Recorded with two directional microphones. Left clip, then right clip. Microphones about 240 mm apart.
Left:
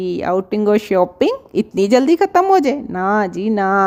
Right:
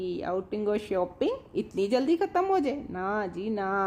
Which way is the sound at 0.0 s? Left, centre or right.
Left.